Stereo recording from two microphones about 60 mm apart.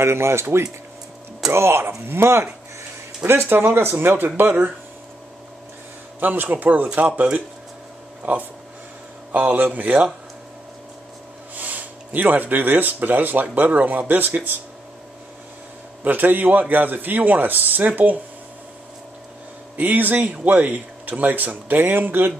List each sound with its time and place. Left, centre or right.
0.0 s speech: right
6.1 s speech: right
8.2 s speech: right
11.5 s speech: right
16.0 s speech: right
19.8 s speech: right